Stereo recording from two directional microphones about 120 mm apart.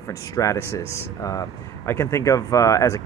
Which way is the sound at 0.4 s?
25° left (ahead or behind).